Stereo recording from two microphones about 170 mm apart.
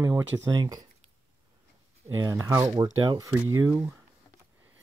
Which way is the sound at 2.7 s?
30° right (ahead or behind).